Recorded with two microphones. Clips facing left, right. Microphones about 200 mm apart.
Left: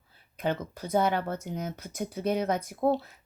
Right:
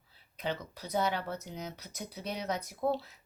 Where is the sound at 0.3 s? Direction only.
50° left (ahead or behind).